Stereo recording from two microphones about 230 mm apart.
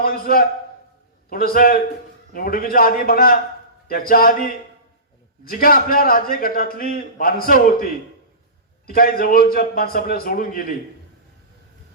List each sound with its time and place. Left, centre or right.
0.0 s a man's voice: left